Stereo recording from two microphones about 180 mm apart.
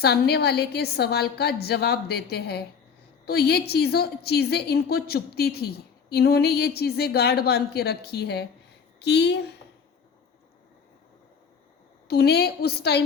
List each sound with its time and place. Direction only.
0.0 s a woman's voice: 65° left (ahead or behind)
12.0 s a woman's voice: 60° left (ahead or behind)